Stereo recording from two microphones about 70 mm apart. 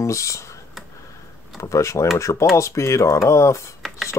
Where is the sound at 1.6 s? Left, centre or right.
Left.